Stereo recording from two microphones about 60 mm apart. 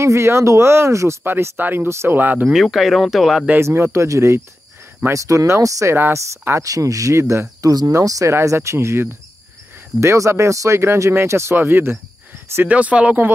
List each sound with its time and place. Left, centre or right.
0.0 s speech: right
1.2 s speech: right
2.5 s speech: centre
3.5 s speech: right
5.9 s speech: right
6.6 s speech: right
7.7 s speech: right
8.3 s speech: right
11.5 s speech: right
12.6 s speech: right